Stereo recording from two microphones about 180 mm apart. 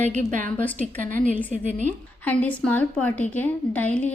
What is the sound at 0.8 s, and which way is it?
A woman's voice, 45° right (ahead or behind).